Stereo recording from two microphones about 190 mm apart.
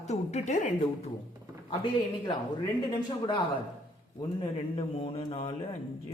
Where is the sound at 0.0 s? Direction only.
35° left (ahead or behind).